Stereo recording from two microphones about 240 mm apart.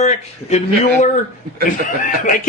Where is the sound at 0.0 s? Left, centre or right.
Left.